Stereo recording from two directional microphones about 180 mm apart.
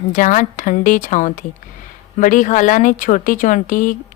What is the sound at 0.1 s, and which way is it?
A woman's voice, 45° left (ahead or behind).